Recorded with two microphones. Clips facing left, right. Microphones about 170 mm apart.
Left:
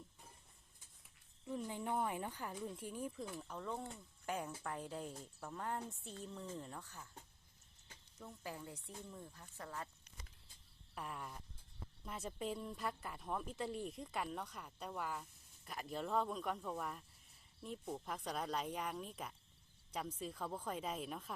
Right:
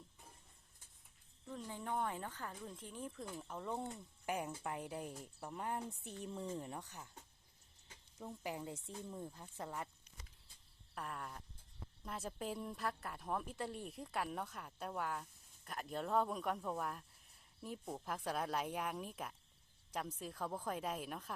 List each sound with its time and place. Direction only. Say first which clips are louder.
1.5 s speech: left 3 dB; 15° left (ahead or behind)
3.3 s speech: right 1 dB; 10° right (ahead or behind)
8.2 s speech: right 4 dB; 20° right (ahead or behind)
10.9 s a woman's voice: right 1 dB; centre (ahead or behind)